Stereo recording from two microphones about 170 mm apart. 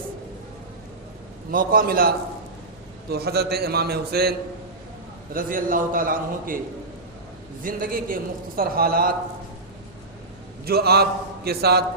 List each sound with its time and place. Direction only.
1.5 s a man's voice: 55° right (ahead or behind)
5.3 s a man's voice: 55° right (ahead or behind)
7.6 s a man's voice: 55° right (ahead or behind)
10.7 s a man's voice: 65° right (ahead or behind)